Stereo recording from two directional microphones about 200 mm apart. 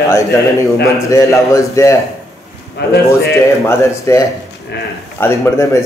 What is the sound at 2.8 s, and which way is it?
Speech, 55° left (ahead or behind).